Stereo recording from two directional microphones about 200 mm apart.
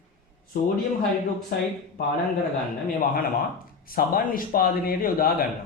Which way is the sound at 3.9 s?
45° left (ahead or behind).